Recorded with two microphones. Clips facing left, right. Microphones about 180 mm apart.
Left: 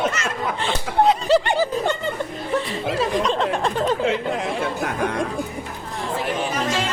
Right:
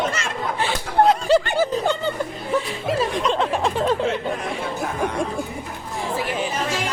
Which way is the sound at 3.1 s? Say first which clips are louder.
Left 1 dB; centre (ahead or behind).